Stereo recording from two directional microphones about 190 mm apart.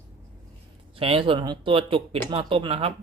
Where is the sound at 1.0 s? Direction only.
30° right (ahead or behind).